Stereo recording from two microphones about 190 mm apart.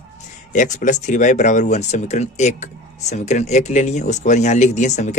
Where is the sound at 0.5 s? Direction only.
40° left (ahead or behind).